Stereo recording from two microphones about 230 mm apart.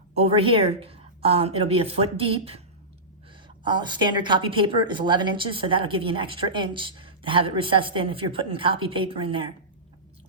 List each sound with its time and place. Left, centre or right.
0.2 s a woman's voice: right
3.6 s a woman's voice: centre